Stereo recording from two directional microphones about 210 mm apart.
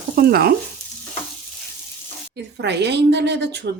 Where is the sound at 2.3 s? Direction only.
55° right (ahead or behind).